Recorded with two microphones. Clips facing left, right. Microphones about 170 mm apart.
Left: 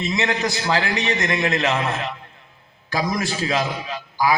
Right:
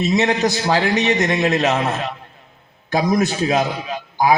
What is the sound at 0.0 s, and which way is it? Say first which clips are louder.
A man's voice: right 6 dB; 25° right (ahead or behind).